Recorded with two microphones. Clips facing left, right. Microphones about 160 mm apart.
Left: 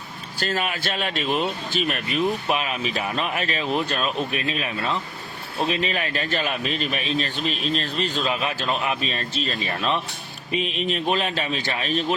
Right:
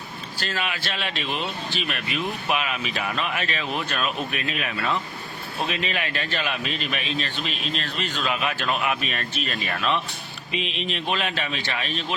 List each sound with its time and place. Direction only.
0.4 s speech: 40° left (ahead or behind)
10.5 s speech: 40° left (ahead or behind)